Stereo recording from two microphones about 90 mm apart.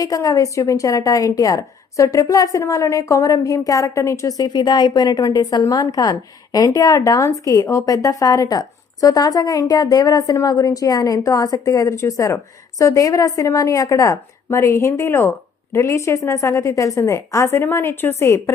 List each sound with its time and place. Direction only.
0.0 s a woman's voice: 40° left (ahead or behind)